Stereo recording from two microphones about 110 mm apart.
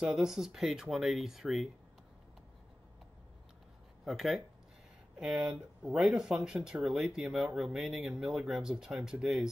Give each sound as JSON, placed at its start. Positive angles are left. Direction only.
{"t": 0.0, "sound": "speech", "side_deg": -5}
{"t": 4.0, "sound": "speech", "side_deg": 0}